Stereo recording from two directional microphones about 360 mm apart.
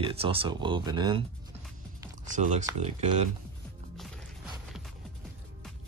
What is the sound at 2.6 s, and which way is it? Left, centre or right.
Speech, centre.